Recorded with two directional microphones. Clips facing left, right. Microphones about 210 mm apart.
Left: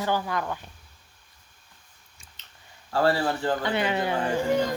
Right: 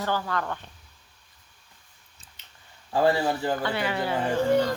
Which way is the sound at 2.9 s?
15° right (ahead or behind).